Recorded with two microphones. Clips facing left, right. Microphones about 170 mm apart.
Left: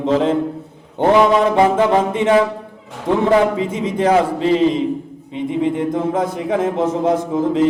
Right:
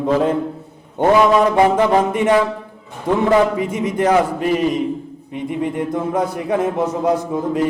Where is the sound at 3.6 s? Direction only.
25° left (ahead or behind).